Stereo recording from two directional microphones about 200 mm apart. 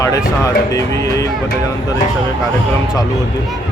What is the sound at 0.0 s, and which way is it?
Speech, 15° left (ahead or behind).